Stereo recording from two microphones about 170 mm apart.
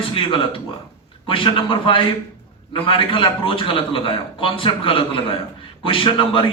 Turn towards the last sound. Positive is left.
turn(degrees=30)  # may be behind; listen again after turning